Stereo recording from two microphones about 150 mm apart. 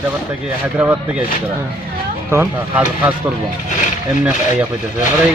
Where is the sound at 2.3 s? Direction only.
15° right (ahead or behind).